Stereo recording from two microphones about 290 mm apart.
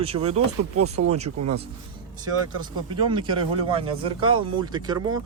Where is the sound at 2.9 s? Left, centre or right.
Centre.